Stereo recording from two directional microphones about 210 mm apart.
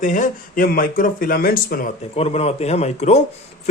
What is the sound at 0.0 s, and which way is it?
Speech, 35° left (ahead or behind).